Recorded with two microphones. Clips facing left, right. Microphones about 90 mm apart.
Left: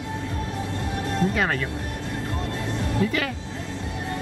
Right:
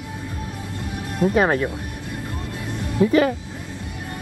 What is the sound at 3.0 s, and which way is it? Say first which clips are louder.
Speech: right 10 dB; 30° right (ahead or behind).